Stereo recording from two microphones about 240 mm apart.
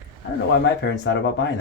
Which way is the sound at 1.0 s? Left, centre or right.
Left.